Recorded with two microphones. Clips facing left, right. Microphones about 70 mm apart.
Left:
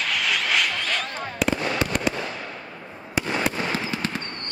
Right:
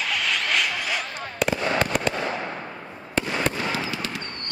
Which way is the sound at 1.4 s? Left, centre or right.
Centre.